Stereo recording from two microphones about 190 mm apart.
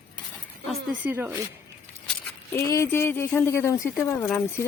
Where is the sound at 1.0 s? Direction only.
10° right (ahead or behind).